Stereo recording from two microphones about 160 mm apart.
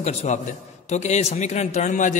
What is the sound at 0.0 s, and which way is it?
A man's voice, 45° left (ahead or behind).